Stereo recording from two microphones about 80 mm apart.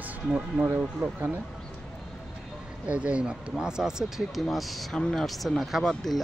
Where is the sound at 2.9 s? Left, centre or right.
Centre.